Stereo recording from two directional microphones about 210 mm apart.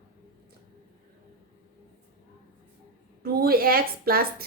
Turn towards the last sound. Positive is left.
turn(degrees=-45)  # may be behind; listen again after turning